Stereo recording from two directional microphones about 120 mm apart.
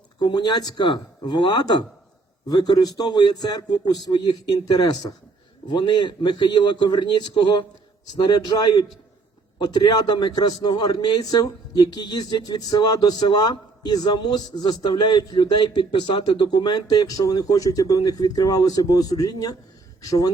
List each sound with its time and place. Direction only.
0.2 s a man's voice: 35° left (ahead or behind)
8.2 s a man's voice: 35° left (ahead or behind)